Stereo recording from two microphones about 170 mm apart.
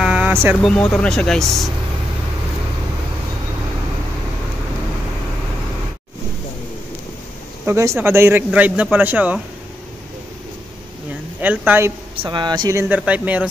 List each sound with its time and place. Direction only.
0.0 s vehicle: 5° right (ahead or behind)
0.7 s speech: 5° left (ahead or behind)
7.6 s speech: 15° right (ahead or behind)
11.4 s speech: 10° right (ahead or behind)
12.2 s speech: 25° right (ahead or behind)
12.8 s speech: 10° right (ahead or behind)